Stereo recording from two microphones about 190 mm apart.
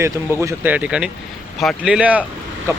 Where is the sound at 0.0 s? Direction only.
10° right (ahead or behind).